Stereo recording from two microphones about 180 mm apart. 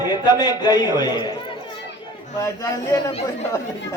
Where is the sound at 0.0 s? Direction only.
20° left (ahead or behind).